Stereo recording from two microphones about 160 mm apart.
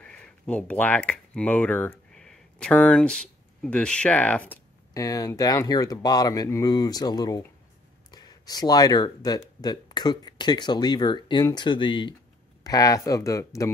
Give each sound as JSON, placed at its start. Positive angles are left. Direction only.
{"t": 0.0, "sound": "speech", "side_deg": 5}
{"t": 4.9, "sound": "speech", "side_deg": 20}